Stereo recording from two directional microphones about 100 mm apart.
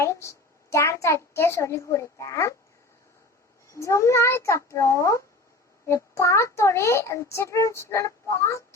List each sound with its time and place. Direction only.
0.0 s a child's voice: 30° left (ahead or behind)
3.7 s a child's voice: 30° left (ahead or behind)